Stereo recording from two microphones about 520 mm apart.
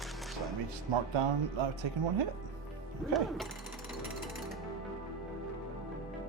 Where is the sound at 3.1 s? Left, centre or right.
Centre.